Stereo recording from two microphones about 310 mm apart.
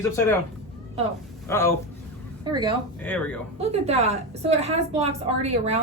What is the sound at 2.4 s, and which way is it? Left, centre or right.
Speech, centre.